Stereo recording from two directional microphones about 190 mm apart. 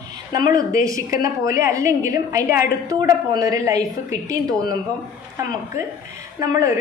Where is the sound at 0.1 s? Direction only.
20° right (ahead or behind).